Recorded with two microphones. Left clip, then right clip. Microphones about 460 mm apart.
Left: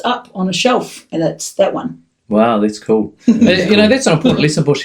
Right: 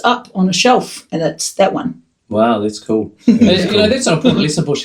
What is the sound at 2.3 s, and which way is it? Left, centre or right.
Speech, left.